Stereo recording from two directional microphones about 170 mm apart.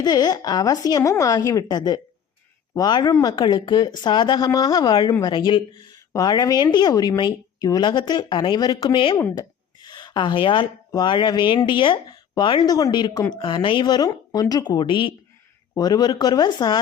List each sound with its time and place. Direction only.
0.0 s a woman's voice: 25° left (ahead or behind)